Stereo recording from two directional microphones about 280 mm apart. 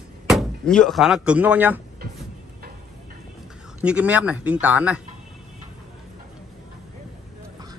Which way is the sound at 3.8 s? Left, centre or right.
Centre.